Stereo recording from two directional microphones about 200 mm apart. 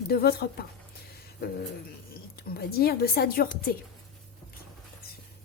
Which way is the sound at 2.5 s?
50° left (ahead or behind).